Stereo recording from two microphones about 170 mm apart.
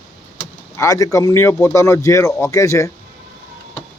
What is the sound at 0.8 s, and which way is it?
Speech, 20° left (ahead or behind).